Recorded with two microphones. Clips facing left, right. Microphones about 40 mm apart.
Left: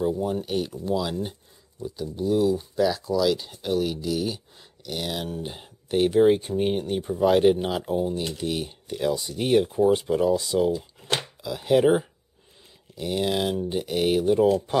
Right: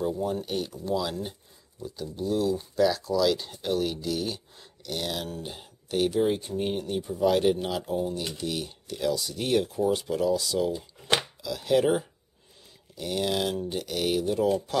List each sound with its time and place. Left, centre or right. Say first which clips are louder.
0.0 s speech: left 3 dB; centre